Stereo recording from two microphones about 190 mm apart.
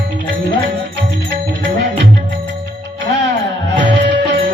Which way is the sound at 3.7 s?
65° right (ahead or behind).